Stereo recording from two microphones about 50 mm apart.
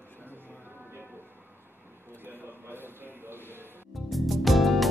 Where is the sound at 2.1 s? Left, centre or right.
Right.